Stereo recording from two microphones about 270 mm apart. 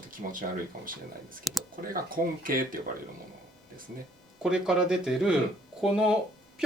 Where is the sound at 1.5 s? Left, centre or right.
Centre.